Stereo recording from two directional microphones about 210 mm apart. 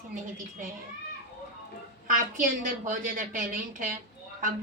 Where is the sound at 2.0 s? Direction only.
40° right (ahead or behind).